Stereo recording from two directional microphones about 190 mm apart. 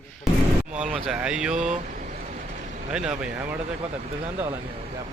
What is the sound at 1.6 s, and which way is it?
Vehicle, 40° right (ahead or behind).